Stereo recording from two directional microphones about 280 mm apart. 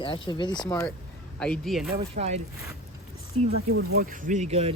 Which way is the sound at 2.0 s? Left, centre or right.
Right.